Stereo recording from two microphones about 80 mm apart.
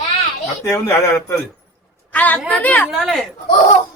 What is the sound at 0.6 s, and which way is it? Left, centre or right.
Speech, left.